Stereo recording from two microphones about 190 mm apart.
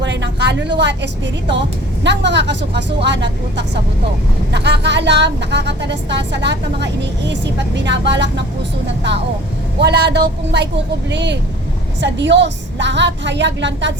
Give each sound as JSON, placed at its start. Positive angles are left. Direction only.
{"t": 0.0, "sound": "a sound", "side_deg": -70}
{"t": 0.8, "sound": "a woman's voice", "side_deg": -65}
{"t": 9.8, "sound": "a woman's voice", "side_deg": -60}